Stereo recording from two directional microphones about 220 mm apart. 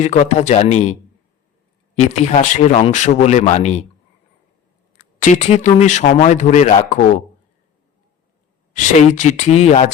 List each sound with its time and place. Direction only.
0.0 s speech: 30° left (ahead or behind)
2.0 s speech: 30° left (ahead or behind)
5.2 s speech: 30° left (ahead or behind)
8.7 s speech: 35° left (ahead or behind)